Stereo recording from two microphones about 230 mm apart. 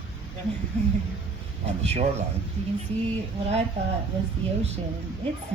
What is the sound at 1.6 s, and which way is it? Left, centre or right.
Speech, right.